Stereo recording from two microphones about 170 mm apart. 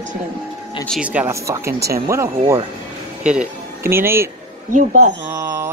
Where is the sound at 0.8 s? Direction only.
5° right (ahead or behind).